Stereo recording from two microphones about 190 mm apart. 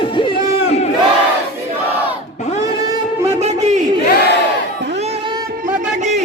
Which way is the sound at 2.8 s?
20° right (ahead or behind).